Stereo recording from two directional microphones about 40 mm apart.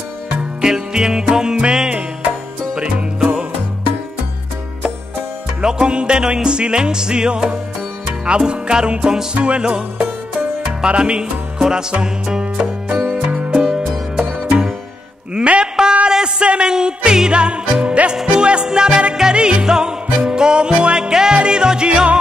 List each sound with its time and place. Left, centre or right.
0.6 s music: centre
5.6 s music: right
13.7 s music: centre
15.3 s a sound: right
16.4 s music: right